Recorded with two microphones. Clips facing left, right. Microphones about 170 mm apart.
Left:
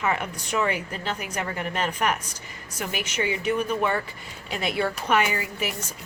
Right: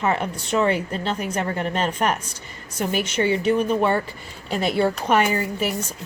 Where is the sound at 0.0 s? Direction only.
30° right (ahead or behind).